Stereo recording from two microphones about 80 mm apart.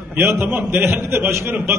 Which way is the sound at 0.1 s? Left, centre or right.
Right.